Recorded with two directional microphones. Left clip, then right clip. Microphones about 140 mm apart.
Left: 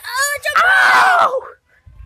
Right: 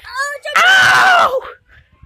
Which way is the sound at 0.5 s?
10° right (ahead or behind).